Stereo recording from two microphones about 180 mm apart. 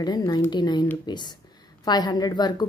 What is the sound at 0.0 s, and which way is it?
A woman's voice, 25° left (ahead or behind).